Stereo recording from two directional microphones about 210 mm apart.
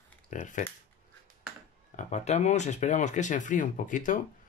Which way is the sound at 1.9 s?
35° left (ahead or behind).